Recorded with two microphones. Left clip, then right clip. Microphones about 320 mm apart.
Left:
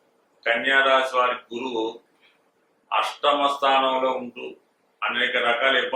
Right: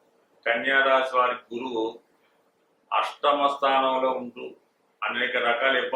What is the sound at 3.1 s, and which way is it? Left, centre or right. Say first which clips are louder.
Speech: left 1 dB; centre.